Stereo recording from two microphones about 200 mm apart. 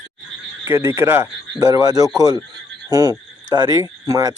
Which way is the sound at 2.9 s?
20° right (ahead or behind).